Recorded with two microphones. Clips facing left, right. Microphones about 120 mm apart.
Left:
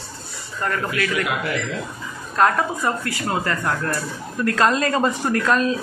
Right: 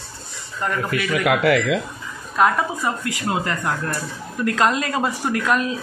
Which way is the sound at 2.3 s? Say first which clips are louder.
Even; 5° right (ahead or behind).